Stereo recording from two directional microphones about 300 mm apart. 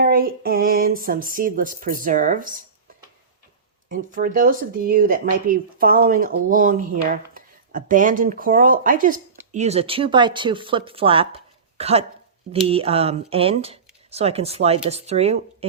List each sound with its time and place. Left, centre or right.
0.0 s speech: right
3.8 s speech: right